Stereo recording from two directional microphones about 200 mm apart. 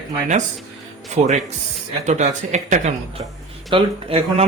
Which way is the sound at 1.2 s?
30° right (ahead or behind).